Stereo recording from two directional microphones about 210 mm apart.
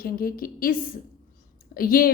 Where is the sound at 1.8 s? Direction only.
45° left (ahead or behind).